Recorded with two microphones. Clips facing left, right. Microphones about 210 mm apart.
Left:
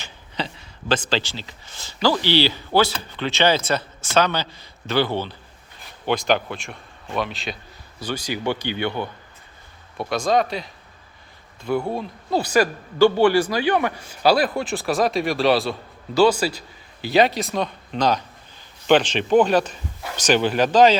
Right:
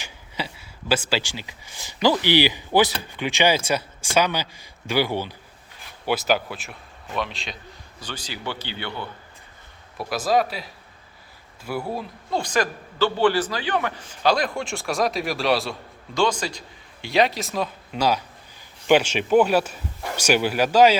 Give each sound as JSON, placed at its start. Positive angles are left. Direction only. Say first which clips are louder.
{"t": 0.0, "sound": "a man's voice", "louder": "left 2 dB", "side_deg": -10}
{"t": 8.0, "sound": "a man's voice", "louder": "left 8 dB", "side_deg": 10}
{"t": 10.1, "sound": "a man's voice", "louder": "left 1 dB", "side_deg": -5}
{"t": 12.4, "sound": "a man's voice", "louder": "left 5 dB", "side_deg": 10}